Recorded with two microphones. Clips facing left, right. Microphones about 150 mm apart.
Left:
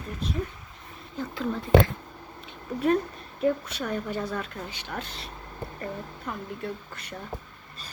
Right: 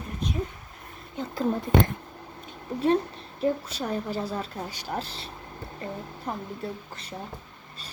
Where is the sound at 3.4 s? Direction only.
30° right (ahead or behind).